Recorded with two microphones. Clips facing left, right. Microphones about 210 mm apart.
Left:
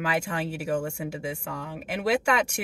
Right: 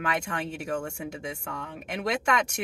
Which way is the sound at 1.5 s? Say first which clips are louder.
Left 2 dB; 35° left (ahead or behind).